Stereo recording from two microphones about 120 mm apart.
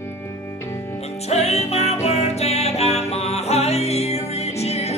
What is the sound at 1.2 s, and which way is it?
Music, 65° left (ahead or behind).